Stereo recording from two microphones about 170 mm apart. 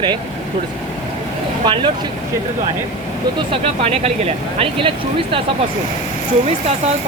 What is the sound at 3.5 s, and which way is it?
Speech, 35° right (ahead or behind).